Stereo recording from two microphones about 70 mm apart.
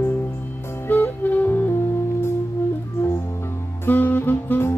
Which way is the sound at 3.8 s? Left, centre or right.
Left.